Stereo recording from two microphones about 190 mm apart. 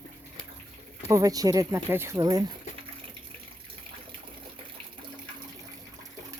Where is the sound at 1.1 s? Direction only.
20° right (ahead or behind).